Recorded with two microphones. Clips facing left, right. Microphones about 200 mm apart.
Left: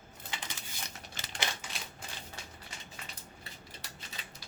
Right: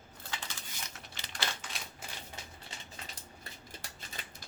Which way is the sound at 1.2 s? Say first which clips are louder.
Left 3 dB; 45° left (ahead or behind).